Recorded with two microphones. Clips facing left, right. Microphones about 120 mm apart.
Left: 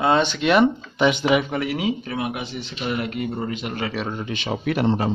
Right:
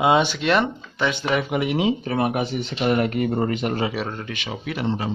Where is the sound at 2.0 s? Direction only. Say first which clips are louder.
Right 5 dB; 45° right (ahead or behind).